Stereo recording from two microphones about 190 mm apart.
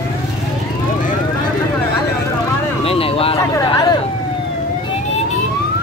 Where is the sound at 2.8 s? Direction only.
30° left (ahead or behind).